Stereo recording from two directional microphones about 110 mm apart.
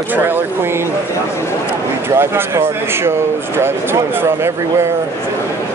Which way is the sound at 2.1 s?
20° right (ahead or behind).